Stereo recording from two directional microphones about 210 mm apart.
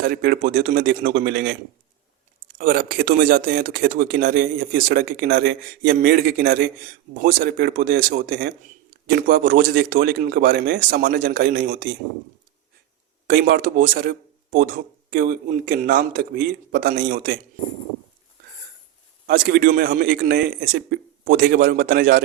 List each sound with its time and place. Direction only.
0.0 s a man's voice: 45° right (ahead or behind)
13.2 s a man's voice: 45° right (ahead or behind)
19.3 s a man's voice: 45° right (ahead or behind)